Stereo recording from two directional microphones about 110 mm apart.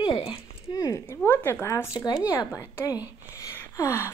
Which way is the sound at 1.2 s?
20° left (ahead or behind).